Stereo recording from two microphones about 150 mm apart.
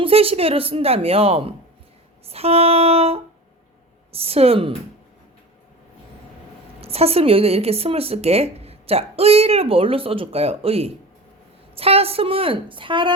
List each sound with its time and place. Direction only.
0.0 s speech: 40° right (ahead or behind)
2.2 s a sound: 40° right (ahead or behind)
4.1 s speech: 40° right (ahead or behind)
6.8 s speech: 40° right (ahead or behind)